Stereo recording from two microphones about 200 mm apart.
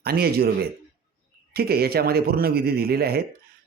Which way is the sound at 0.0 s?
50° right (ahead or behind).